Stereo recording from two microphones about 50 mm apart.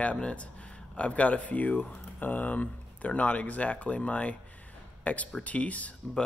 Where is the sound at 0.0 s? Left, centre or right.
Left.